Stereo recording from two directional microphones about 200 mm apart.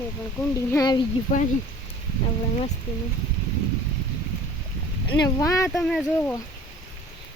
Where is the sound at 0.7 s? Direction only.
15° left (ahead or behind).